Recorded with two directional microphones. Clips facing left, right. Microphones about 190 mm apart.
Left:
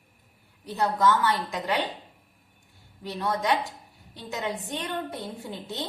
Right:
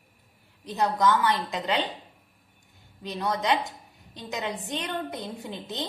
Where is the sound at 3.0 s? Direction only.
20° right (ahead or behind).